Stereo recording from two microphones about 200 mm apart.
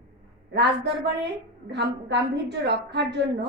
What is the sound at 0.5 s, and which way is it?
A woman's voice, 55° right (ahead or behind).